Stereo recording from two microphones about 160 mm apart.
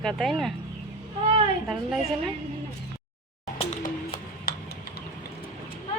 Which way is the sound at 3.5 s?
50° left (ahead or behind).